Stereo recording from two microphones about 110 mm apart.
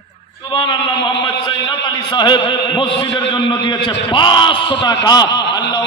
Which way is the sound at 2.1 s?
45° left (ahead or behind).